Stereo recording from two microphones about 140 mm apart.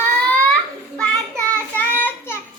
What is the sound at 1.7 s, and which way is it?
Child singing, 15° left (ahead or behind).